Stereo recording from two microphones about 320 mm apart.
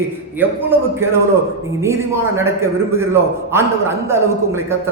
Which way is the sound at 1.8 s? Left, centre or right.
Centre.